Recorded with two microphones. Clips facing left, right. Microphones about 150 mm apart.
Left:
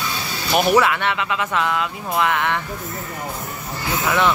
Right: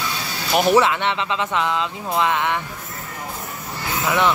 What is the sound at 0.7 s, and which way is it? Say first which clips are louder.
Speech: even; 25° right (ahead or behind).